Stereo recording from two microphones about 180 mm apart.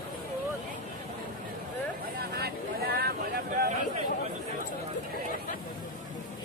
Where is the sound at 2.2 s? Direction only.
60° right (ahead or behind).